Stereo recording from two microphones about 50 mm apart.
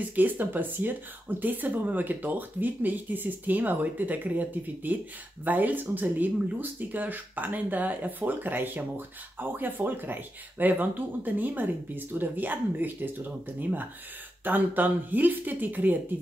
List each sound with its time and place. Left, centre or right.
0.1 s speech: right